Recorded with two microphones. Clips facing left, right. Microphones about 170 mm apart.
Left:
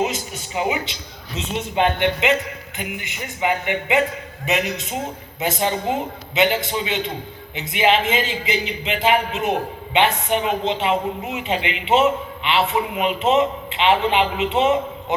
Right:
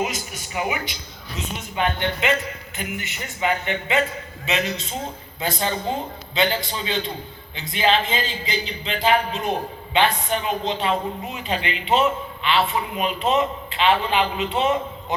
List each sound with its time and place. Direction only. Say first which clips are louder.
0.0 s a man's voice: left 3 dB; 25° left (ahead or behind)